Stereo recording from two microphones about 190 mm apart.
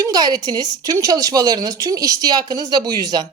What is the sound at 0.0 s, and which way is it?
Speech, 20° right (ahead or behind).